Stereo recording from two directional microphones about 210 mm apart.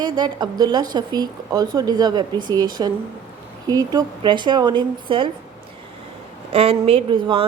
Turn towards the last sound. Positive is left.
turn(degrees=-25)  # may be behind; listen again after turning